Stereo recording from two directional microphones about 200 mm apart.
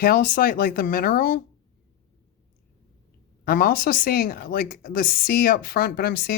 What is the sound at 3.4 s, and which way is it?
Speech, 45° left (ahead or behind).